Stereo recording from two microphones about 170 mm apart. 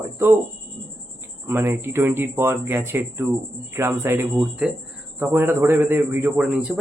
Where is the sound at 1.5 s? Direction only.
15° right (ahead or behind).